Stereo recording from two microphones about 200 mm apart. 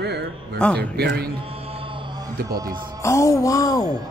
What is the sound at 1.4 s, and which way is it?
Mantra, 30° right (ahead or behind).